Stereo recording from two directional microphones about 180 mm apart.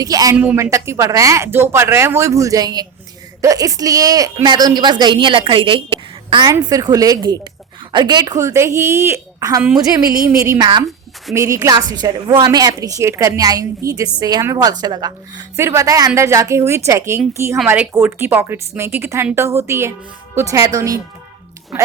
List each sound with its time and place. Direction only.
0.0 s a woman's voice: 20° right (ahead or behind)
21.7 s a woman's voice: 5° right (ahead or behind)